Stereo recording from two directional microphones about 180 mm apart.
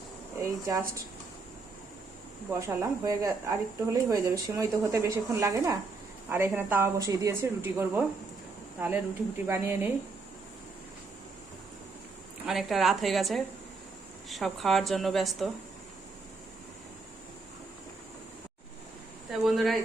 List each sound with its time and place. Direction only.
0.3 s a woman's voice: 15° right (ahead or behind)
2.5 s a woman's voice: 15° right (ahead or behind)
12.5 s a woman's voice: centre (ahead or behind)
19.3 s a woman's voice: centre (ahead or behind)